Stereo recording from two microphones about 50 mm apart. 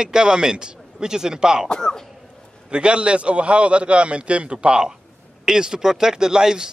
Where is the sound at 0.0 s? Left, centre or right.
Centre.